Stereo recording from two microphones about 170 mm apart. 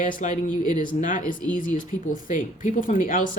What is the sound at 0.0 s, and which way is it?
Speech, 50° left (ahead or behind).